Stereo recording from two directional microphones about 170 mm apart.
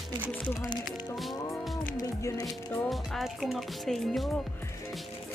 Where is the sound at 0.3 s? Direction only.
10° left (ahead or behind).